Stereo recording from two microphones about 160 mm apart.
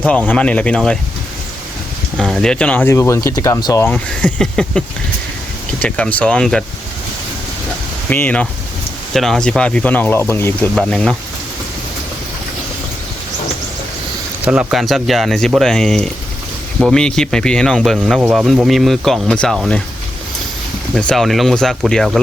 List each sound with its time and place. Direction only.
0.0 s speech: 10° left (ahead or behind)
2.1 s speech: 5° left (ahead or behind); by 3.8 s 20° left (ahead or behind)
3.8 s speech: 5° left (ahead or behind)
5.8 s speech: 10° left (ahead or behind)
8.1 s speech: 10° left (ahead or behind)
10.8 s speech: 5° left (ahead or behind)
14.4 s speech: 5° right (ahead or behind)
20.9 s speech: 5° left (ahead or behind)